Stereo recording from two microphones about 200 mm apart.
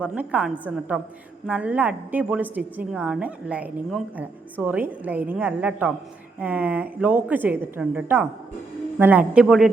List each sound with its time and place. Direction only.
0.0 s a man's voice: 5° right (ahead or behind)